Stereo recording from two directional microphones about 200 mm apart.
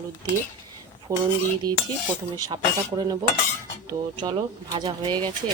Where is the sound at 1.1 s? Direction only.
15° right (ahead or behind).